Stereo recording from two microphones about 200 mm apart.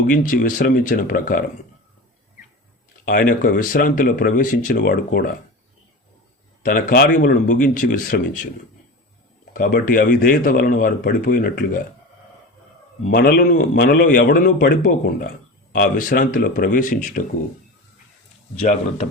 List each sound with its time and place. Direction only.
0.1 s a man's voice: 40° left (ahead or behind)
3.0 s a man's voice: 45° left (ahead or behind)
6.6 s a man's voice: 45° left (ahead or behind)
9.5 s a man's voice: 45° left (ahead or behind)
13.1 s a man's voice: 50° left (ahead or behind)
18.6 s speech: 35° left (ahead or behind)